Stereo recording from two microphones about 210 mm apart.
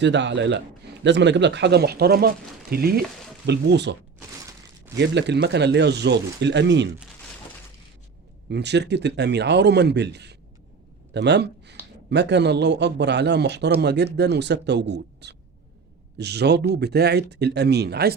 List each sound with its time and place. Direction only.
0.0 s a man's voice: 55° right (ahead or behind)
4.9 s speech: 55° right (ahead or behind)
8.4 s a man's voice: 55° right (ahead or behind)